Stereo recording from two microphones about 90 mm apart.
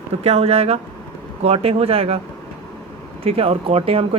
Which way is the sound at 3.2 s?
90° right.